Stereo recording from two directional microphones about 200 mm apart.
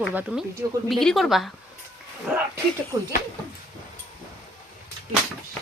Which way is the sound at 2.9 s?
20° right (ahead or behind).